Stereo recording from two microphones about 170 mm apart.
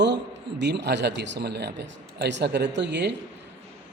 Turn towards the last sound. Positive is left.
turn(degrees=-90)